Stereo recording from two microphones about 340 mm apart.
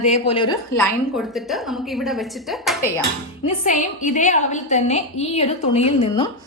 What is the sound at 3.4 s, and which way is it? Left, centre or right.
A woman's voice, left.